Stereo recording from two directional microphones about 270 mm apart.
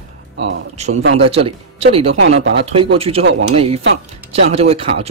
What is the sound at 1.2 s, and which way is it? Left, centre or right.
Speech, right.